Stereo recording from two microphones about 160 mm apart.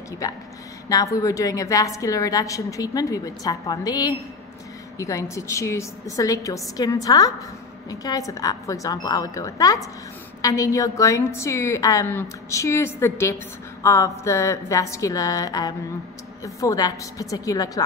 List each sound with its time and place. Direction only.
0.2 s a woman's voice: 20° left (ahead or behind)